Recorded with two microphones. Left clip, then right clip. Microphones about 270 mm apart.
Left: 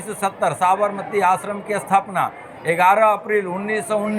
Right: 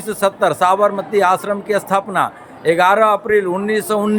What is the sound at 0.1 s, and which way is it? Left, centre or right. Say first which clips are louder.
A man's voice: right 5 dB; centre.